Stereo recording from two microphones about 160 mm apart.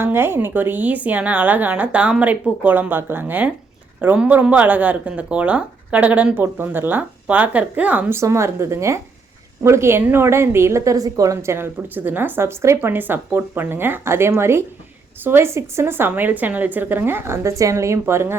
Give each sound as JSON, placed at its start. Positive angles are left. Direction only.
{"t": 0.0, "sound": "a woman's voice", "side_deg": -15}